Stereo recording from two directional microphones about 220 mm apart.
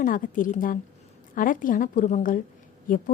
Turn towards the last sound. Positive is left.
turn(degrees=40)  # may be behind; listen again after turning